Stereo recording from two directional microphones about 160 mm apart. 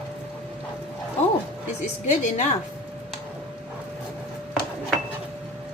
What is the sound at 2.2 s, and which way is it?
Speech, 45° left (ahead or behind).